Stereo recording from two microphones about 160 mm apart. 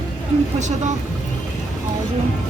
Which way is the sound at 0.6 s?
50° right (ahead or behind).